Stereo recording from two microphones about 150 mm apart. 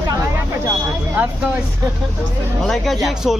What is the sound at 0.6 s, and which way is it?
Vehicle, 10° right (ahead or behind).